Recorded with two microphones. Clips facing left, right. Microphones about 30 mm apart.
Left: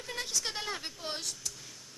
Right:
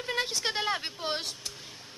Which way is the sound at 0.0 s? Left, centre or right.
Right.